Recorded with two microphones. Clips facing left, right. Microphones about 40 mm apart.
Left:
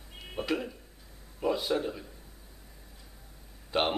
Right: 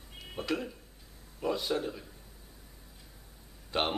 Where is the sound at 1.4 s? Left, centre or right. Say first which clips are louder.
Left 3 dB; centre.